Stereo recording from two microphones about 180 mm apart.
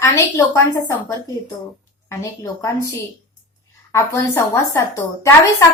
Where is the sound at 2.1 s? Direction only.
15° left (ahead or behind).